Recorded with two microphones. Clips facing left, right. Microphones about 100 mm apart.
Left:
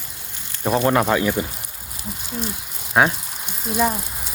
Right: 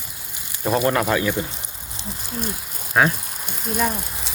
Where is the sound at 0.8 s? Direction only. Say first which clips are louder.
Left 4 dB; 10° left (ahead or behind).